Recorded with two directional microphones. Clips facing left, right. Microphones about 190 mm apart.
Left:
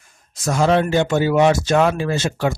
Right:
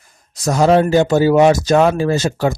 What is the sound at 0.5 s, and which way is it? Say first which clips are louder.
Speech: right 4 dB; 40° right (ahead or behind).